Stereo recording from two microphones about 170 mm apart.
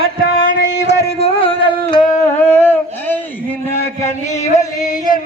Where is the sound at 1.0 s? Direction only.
35° left (ahead or behind).